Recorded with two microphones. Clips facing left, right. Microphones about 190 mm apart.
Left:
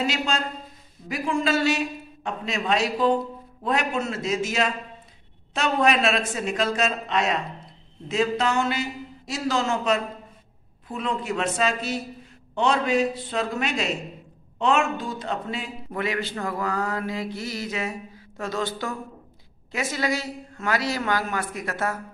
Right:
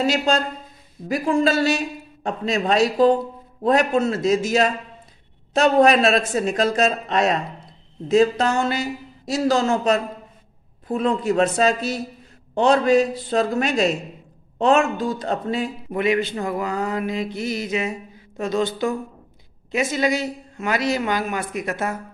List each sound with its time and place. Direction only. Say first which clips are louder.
0.0 s a man's voice: right 6 dB; 40° right (ahead or behind)
15.9 s a woman's voice: right 6 dB; 20° right (ahead or behind)